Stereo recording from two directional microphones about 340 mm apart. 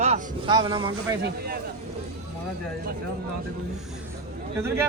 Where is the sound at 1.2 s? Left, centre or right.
Right.